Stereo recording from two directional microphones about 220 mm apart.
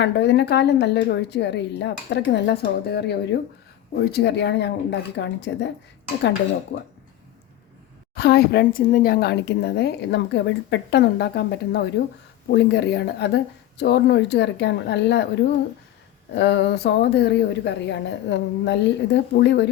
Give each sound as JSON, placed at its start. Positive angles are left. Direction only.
{"t": 0.0, "sound": "speech", "side_deg": 50}
{"t": 8.1, "sound": "speech", "side_deg": 45}